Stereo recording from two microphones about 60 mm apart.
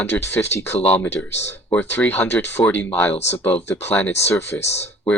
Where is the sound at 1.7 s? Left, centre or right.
Left.